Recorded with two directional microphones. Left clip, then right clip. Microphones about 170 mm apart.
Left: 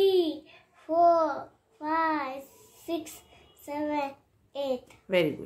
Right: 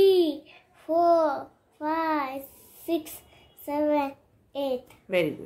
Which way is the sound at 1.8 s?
45° right (ahead or behind).